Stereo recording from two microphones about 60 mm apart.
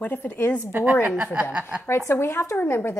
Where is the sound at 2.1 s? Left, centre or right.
Left.